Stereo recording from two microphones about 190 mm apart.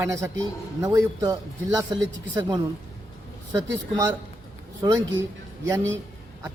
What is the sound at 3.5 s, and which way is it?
A man's voice, 20° right (ahead or behind).